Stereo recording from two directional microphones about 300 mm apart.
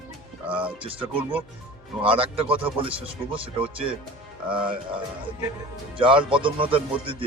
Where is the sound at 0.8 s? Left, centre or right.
Centre.